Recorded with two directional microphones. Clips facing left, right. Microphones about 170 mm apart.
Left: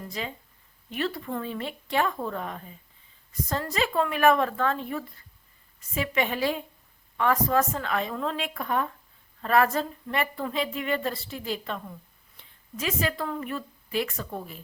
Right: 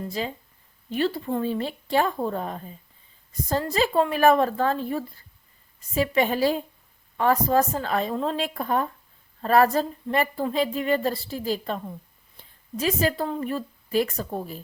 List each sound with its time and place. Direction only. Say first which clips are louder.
0.0 s a woman's voice: right 5 dB; 35° right (ahead or behind)